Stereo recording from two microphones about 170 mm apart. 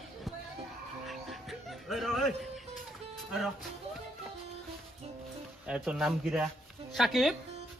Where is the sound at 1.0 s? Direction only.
Centre (ahead or behind).